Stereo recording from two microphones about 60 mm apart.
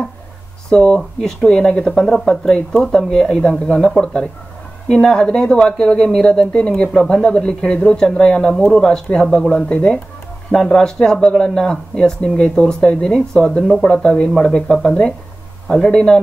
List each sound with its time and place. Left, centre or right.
0.7 s speech: centre